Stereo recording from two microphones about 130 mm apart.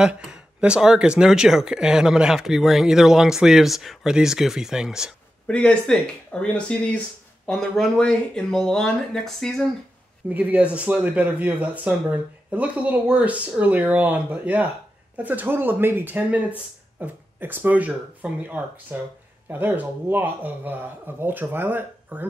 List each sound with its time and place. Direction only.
0.0 s speech: 5° right (ahead or behind)
5.5 s speech: 5° left (ahead or behind)
10.3 s speech: 10° right (ahead or behind)